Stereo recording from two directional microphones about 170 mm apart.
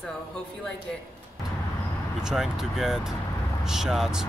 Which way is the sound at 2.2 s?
5° right (ahead or behind).